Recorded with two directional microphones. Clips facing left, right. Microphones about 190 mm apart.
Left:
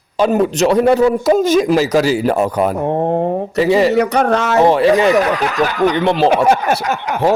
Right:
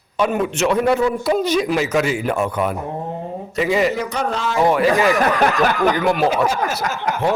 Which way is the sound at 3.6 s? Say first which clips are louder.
Left 5 dB; 35° left (ahead or behind).